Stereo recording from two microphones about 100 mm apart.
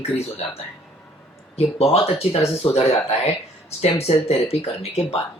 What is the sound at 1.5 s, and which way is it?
Speech, 90° left.